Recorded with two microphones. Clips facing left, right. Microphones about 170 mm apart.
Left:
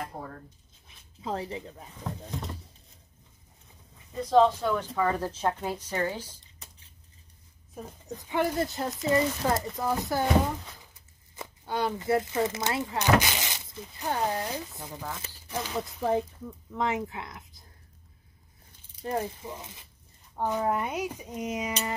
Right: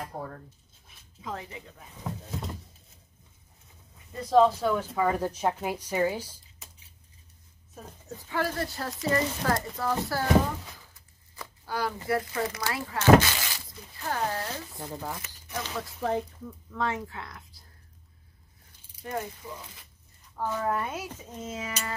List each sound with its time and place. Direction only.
1.2 s speech: 35° left (ahead or behind)
2.0 s speech: 5° right (ahead or behind)
4.1 s speech: centre (ahead or behind)
7.7 s speech: 15° left (ahead or behind)
11.3 s speech: 25° left (ahead or behind)
14.8 s speech: 20° right (ahead or behind)
15.2 s crumpling: 30° left (ahead or behind)
15.6 s speech: 15° left (ahead or behind)
19.0 s speech: 30° left (ahead or behind)